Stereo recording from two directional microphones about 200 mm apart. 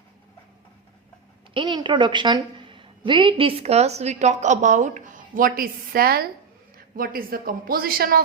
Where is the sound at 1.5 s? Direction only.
25° right (ahead or behind).